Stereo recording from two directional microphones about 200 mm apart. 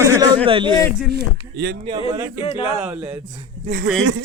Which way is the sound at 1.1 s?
55° right (ahead or behind).